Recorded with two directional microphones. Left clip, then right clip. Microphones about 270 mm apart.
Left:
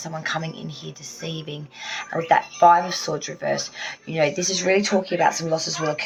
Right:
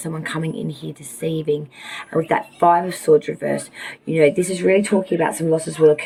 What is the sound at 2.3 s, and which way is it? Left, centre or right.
Speech, centre.